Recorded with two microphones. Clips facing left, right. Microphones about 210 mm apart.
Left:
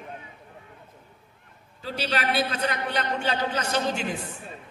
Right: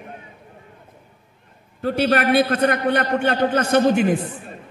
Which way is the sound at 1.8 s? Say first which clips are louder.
Right 10 dB; 55° right (ahead or behind).